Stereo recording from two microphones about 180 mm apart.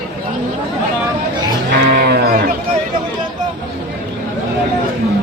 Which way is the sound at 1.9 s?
65° right (ahead or behind).